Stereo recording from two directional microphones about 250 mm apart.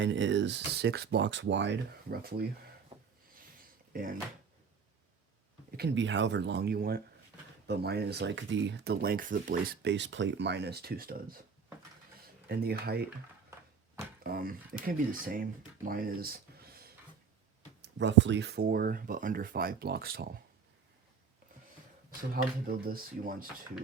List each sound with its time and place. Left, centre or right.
0.0 s speech: right
5.7 s speech: right
12.5 s speech: right
14.3 s speech: right
15.9 s a sound: right
17.8 s speech: right
22.3 s speech: right